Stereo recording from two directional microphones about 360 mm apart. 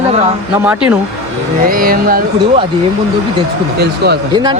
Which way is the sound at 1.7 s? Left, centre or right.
Right.